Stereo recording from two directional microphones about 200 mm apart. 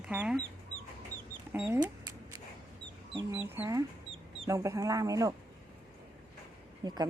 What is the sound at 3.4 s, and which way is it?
Speech, 10° right (ahead or behind).